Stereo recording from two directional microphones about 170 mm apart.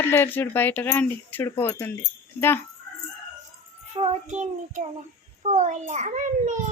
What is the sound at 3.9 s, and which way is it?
A child's voice, 40° right (ahead or behind).